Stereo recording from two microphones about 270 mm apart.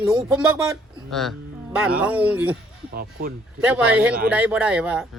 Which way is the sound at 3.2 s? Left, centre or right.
Right.